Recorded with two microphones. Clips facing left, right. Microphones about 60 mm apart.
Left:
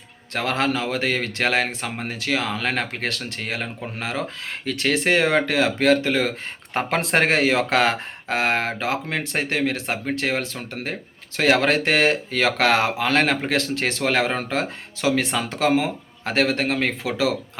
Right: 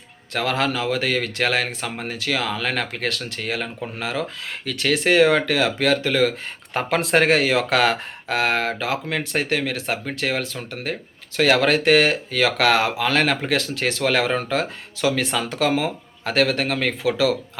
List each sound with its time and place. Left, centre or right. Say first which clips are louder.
0.3 s speech: even; left